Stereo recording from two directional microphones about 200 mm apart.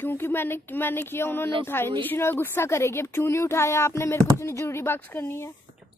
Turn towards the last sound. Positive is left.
turn(degrees=10)  # may be behind; listen again after turning